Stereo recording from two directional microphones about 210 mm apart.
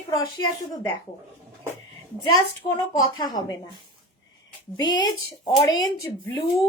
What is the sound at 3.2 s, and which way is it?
Speech, 20° left (ahead or behind).